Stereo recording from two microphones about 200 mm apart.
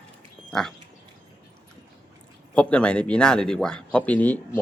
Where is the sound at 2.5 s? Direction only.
5° left (ahead or behind).